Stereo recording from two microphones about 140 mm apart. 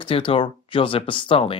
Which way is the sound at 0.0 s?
40° left (ahead or behind).